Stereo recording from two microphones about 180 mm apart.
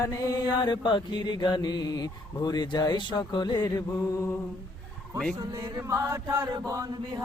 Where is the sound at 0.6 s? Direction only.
25° left (ahead or behind).